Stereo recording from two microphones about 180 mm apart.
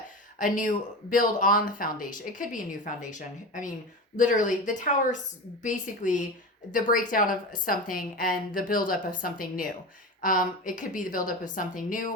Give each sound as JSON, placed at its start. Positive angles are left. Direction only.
{"t": 0.3, "sound": "a woman's voice", "side_deg": 45}